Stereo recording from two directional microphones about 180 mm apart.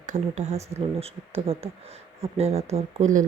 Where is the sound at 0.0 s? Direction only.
40° right (ahead or behind).